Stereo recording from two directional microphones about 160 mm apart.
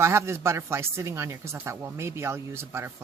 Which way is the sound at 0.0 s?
15° right (ahead or behind).